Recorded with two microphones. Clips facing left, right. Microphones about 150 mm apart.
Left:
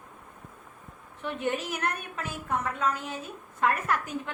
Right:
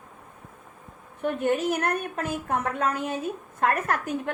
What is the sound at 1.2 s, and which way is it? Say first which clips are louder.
A woman's voice: right 6 dB; 50° right (ahead or behind).